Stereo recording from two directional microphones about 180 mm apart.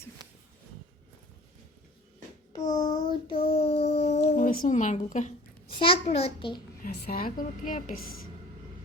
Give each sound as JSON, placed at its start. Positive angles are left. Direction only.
{"t": 2.5, "sound": "child singing", "side_deg": 20}
{"t": 4.2, "sound": "speech", "side_deg": 45}
{"t": 5.7, "sound": "a child's voice", "side_deg": 30}
{"t": 6.8, "sound": "a woman's voice", "side_deg": 55}